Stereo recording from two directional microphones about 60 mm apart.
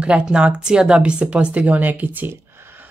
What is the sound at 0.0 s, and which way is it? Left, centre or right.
Speech, centre.